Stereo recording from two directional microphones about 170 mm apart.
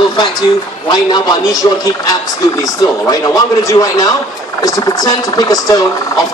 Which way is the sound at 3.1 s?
20° left (ahead or behind).